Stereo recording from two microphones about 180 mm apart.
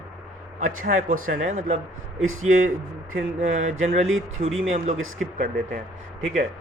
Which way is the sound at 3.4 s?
40° right (ahead or behind).